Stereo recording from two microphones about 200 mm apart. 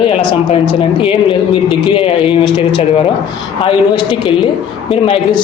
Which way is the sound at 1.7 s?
25° left (ahead or behind).